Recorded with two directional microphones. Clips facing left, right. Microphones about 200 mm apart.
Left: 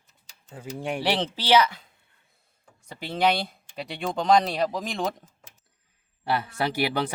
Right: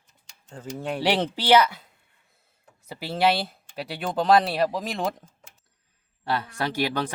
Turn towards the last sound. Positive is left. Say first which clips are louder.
# left 1 dB
turn(degrees=10)  # may be behind; listen again after turning